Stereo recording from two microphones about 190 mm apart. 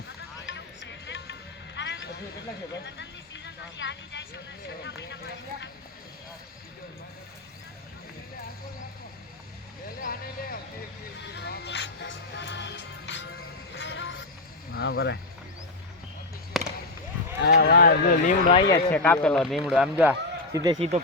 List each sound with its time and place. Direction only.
0.4 s music: 70° left (ahead or behind)
2.7 s speech: 70° left (ahead or behind)
10.0 s speech: 50° left (ahead or behind)
11.3 s music: 65° left (ahead or behind); by 14.3 s 90° left
14.7 s speech: 55° left (ahead or behind)
16.5 s basketball bounce: centre (ahead or behind)
17.4 s speech: 60° left (ahead or behind); by 18.5 s 45° left (ahead or behind)
18.9 s speech: 5° left (ahead or behind)
20.7 s speech: 30° right (ahead or behind)